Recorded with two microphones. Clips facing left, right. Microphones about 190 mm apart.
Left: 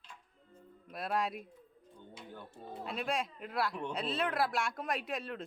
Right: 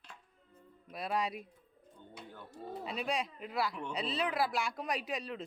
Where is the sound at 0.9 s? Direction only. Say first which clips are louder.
Even; centre (ahead or behind).